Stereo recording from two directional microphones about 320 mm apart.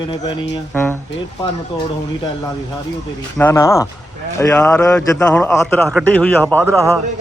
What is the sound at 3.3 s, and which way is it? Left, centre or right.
A man's voice, centre.